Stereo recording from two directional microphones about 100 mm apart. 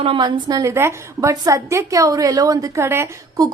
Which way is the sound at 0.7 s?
30° right (ahead or behind).